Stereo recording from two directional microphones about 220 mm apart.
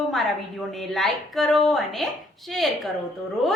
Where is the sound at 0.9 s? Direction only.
Centre (ahead or behind).